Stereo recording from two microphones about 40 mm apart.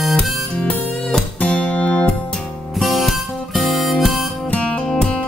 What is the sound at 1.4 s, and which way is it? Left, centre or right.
Music, left.